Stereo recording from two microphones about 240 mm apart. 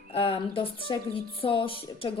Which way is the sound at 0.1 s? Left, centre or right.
Left.